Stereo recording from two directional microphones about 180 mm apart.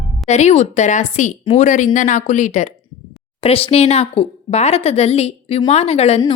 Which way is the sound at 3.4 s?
30° left (ahead or behind).